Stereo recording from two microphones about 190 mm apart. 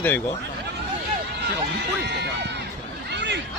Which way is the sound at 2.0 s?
65° right (ahead or behind).